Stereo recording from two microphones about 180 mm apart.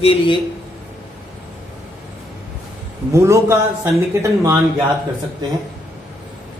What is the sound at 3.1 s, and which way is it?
Speech, 15° right (ahead or behind).